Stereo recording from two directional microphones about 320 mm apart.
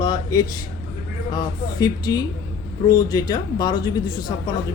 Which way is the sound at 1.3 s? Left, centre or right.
Centre.